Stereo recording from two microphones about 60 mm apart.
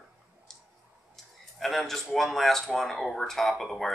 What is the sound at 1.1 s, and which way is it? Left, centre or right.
Livestock, centre.